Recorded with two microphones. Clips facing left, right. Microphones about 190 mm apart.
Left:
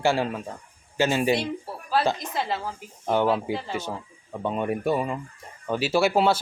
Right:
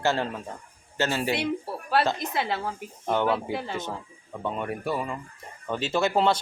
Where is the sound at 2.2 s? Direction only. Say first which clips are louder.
Even; 65° right (ahead or behind).